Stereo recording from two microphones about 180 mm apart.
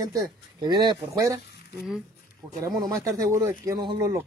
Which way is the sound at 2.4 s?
25° right (ahead or behind).